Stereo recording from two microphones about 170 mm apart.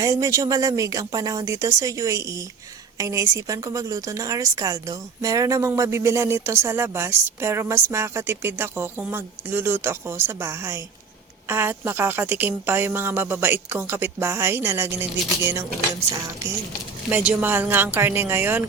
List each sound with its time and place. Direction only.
0.0 s a woman's voice: 20° right (ahead or behind)
17.1 s a woman's voice: 10° right (ahead or behind)